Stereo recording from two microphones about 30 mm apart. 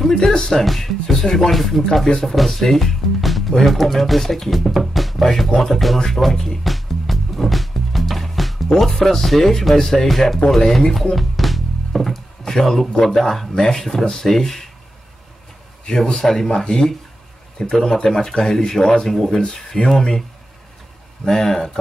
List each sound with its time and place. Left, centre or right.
0.4 s speech: centre
6.6 s music: centre
8.7 s speech: centre
11.1 s music: centre
13.0 s speech: centre
15.8 s a man's voice: left
21.3 s speech: centre